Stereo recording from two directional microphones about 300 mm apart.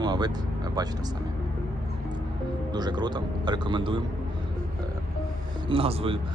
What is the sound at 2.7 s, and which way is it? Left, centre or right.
Speech, centre.